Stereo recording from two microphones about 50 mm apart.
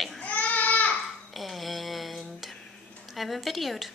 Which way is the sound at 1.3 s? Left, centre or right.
Centre.